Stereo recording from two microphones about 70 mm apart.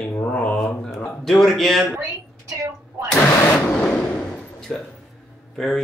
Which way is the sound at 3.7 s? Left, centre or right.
Centre.